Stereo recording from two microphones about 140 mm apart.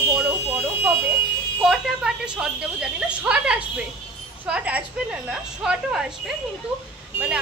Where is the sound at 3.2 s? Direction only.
5° right (ahead or behind).